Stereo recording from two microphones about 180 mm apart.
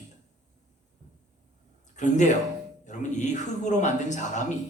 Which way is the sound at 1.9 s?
40° left (ahead or behind).